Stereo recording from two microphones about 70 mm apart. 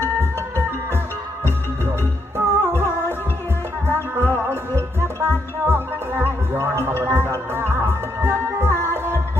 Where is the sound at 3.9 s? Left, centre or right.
Right.